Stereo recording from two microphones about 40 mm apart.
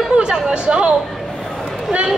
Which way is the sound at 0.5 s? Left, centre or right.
Right.